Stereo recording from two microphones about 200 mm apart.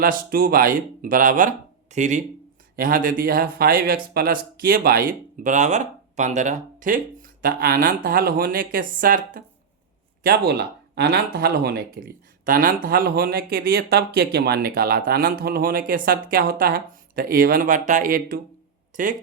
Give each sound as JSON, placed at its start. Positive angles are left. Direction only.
{"t": 0.0, "sound": "speech", "side_deg": -45}